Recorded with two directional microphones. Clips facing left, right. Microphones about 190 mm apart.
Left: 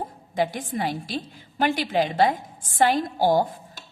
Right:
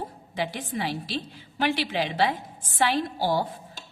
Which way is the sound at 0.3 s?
45° left (ahead or behind).